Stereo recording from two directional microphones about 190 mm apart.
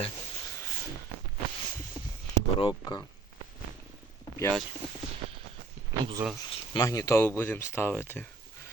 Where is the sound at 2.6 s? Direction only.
25° left (ahead or behind).